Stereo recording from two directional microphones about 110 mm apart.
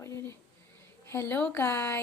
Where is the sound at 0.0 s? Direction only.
25° left (ahead or behind).